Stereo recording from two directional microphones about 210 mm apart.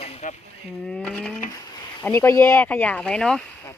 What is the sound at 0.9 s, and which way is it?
Speech, 5° left (ahead or behind).